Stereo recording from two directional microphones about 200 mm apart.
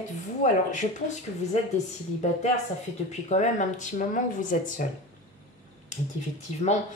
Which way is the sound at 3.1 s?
35° left (ahead or behind).